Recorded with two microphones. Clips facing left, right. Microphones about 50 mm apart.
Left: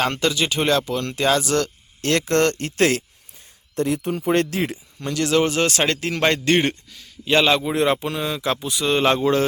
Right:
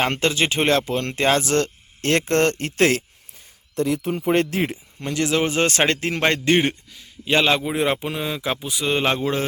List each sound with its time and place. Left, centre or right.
0.0 s speech: right
4.3 s a man's voice: right; by 5.5 s centre
5.5 s a man's voice: right
6.6 s mantra: centre